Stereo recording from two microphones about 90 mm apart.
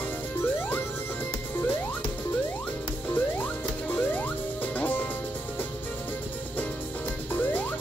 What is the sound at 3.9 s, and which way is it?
Music, 20° left (ahead or behind).